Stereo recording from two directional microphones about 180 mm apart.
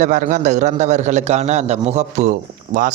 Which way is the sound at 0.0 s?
45° right (ahead or behind).